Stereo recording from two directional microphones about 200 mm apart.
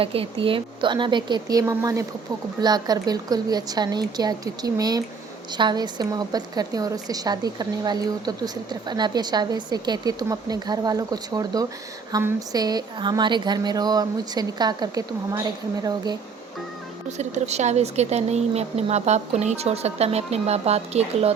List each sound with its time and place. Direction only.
0.0 s a woman's voice: 30° right (ahead or behind)
17.2 s speech: 35° right (ahead or behind)